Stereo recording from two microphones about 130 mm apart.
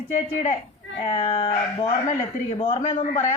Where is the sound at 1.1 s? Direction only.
45° left (ahead or behind).